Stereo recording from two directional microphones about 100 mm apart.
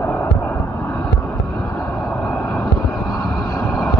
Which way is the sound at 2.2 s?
30° left (ahead or behind).